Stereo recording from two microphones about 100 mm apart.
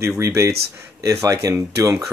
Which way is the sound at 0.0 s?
30° right (ahead or behind).